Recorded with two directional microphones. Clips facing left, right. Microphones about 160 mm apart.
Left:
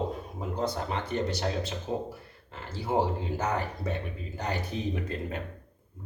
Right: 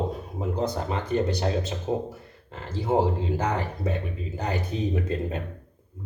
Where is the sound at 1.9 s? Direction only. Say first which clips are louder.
Right 5 dB; 25° right (ahead or behind).